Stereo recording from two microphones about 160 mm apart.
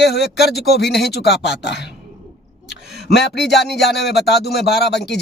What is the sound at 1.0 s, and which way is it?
Speech, 90° left.